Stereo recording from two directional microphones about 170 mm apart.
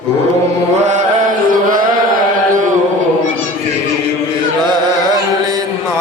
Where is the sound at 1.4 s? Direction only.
55° right (ahead or behind).